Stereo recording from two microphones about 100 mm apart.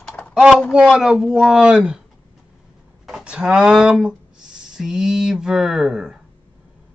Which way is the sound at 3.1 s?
10° right (ahead or behind).